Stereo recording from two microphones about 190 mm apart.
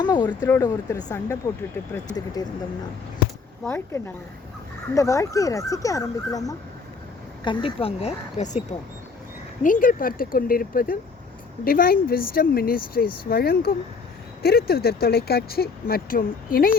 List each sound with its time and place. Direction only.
0.0 s speech: 25° left (ahead or behind)
2.4 s speech: 20° left (ahead or behind)
3.6 s speech: 10° left (ahead or behind); by 8.6 s 35° left (ahead or behind)
9.6 s speech: 45° left (ahead or behind)